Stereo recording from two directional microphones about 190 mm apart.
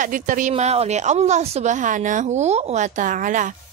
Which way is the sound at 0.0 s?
45° right (ahead or behind).